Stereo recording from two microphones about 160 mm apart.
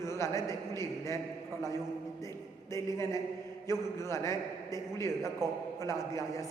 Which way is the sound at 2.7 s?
20° left (ahead or behind).